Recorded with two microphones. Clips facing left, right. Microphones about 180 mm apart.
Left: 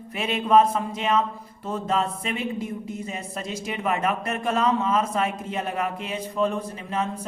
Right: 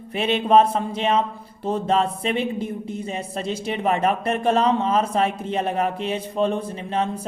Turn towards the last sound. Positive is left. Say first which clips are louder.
# right 3 dB
turn(degrees=-30)  # may be behind; listen again after turning